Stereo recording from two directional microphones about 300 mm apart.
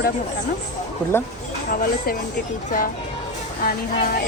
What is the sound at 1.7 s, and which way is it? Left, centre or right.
Speech, left.